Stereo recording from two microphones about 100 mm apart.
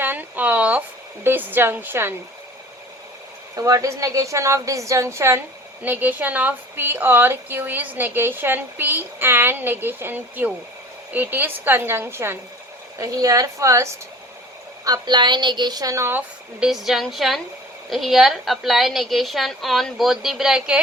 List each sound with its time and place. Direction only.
0.0 s a sound: 20° right (ahead or behind)
1.2 s a woman's voice: 20° right (ahead or behind)
3.5 s a woman's voice: 35° right (ahead or behind)
5.8 s a woman's voice: 20° right (ahead or behind)
13.0 s a woman's voice: 35° right (ahead or behind)
14.8 s a woman's voice: 40° right (ahead or behind); by 16.2 s 25° right (ahead or behind)
16.6 s a woman's voice: 5° right (ahead or behind)